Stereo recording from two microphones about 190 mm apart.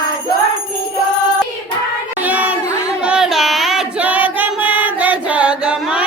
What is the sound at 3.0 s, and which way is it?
Singing, 5° right (ahead or behind).